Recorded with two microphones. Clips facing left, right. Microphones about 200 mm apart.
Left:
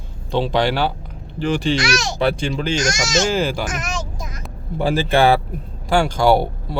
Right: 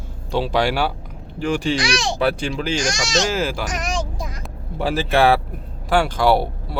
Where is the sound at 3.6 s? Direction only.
35° right (ahead or behind).